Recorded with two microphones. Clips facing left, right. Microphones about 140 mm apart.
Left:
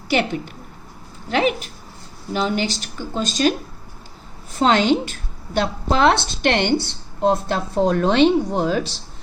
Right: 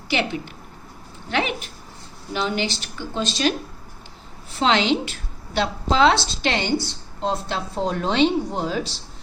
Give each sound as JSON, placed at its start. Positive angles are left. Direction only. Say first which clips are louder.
{"t": 1.3, "sound": "speech", "louder": "left 5 dB", "side_deg": 40}
{"t": 4.5, "sound": "speech", "louder": "left 3 dB", "side_deg": 45}